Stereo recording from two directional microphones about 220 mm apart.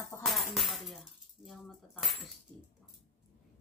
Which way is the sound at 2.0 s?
Centre (ahead or behind).